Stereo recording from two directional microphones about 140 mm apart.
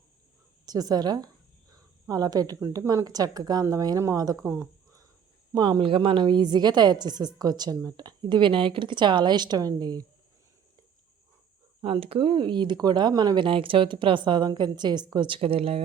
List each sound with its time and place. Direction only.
0.6 s speech: 25° right (ahead or behind)
5.5 s a woman's voice: 30° right (ahead or behind)
11.8 s a woman's voice: 40° right (ahead or behind)